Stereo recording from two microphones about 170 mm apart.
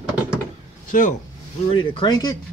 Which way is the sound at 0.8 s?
50° left (ahead or behind).